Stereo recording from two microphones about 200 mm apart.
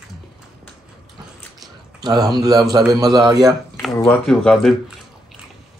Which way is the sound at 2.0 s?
20° right (ahead or behind).